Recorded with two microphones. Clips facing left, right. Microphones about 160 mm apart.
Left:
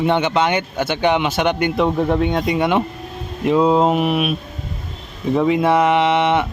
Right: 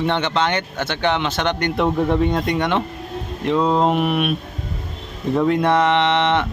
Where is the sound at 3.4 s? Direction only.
10° left (ahead or behind).